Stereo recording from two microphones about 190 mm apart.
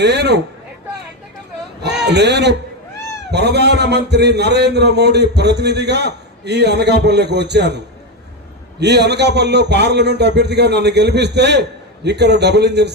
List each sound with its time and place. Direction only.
0.0 s a man's voice: 60° right (ahead or behind)
2.0 s a man's voice: 65° right (ahead or behind)
8.8 s a man's voice: 60° right (ahead or behind)